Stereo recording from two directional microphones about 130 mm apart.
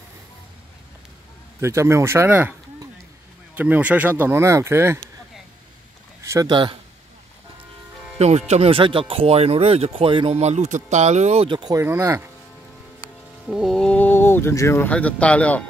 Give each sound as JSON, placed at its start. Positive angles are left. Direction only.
{"t": 1.6, "sound": "speech", "side_deg": -20}
{"t": 3.5, "sound": "speech", "side_deg": -10}
{"t": 6.2, "sound": "a sound", "side_deg": -20}
{"t": 6.5, "sound": "a man's voice", "side_deg": -40}
{"t": 8.2, "sound": "speech", "side_deg": -55}
{"t": 11.5, "sound": "a man's voice", "side_deg": -35}
{"t": 11.8, "sound": "speech", "side_deg": -20}
{"t": 13.5, "sound": "speech", "side_deg": 0}